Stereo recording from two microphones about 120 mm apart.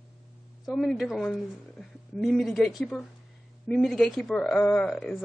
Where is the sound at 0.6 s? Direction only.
5° left (ahead or behind).